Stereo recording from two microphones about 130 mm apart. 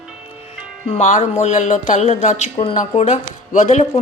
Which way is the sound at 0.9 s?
65° left (ahead or behind).